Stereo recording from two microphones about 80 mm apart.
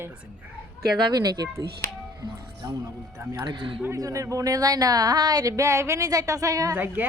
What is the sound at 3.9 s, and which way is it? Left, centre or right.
Speech, right.